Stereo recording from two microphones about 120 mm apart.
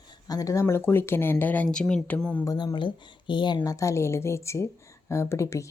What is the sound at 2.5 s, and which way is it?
Speech, 35° left (ahead or behind).